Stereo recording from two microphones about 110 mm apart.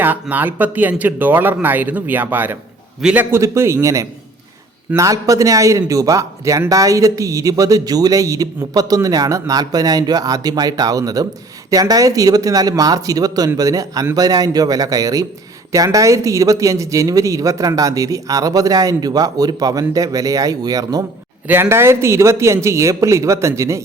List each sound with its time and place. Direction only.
0.0 s speech: 15° right (ahead or behind)
3.3 s a man's voice: 25° right (ahead or behind)
21.4 s a man's voice: 20° right (ahead or behind)